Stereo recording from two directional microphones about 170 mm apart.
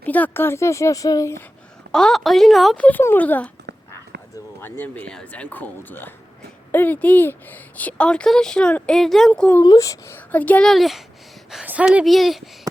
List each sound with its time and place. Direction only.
0.0 s speech: 10° left (ahead or behind)
1.9 s speech: 5° left (ahead or behind)
4.6 s speech: 10° left (ahead or behind)
9.6 s speech: 20° left (ahead or behind); by 12.4 s centre (ahead or behind)